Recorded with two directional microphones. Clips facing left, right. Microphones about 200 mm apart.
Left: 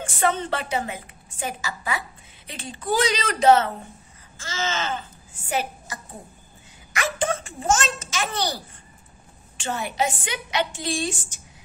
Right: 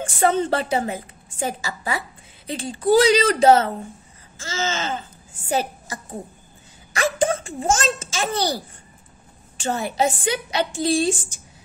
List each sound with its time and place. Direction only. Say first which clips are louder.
0.0 s a woman's voice: right 4 dB; 30° right (ahead or behind)
6.9 s a sound: right 5 dB; 30° right (ahead or behind)
9.6 s a woman's voice: right 4 dB; 35° right (ahead or behind)